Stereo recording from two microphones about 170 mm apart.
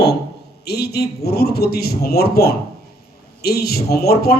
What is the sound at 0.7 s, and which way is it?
A man's voice, 70° left (ahead or behind).